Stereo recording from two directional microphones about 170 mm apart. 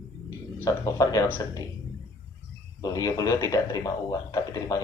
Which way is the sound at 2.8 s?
20° left (ahead or behind).